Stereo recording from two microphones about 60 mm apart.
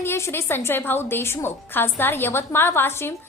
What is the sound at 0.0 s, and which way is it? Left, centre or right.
A woman's voice, left.